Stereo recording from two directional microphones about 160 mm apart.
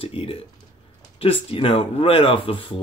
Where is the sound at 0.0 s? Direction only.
35° left (ahead or behind).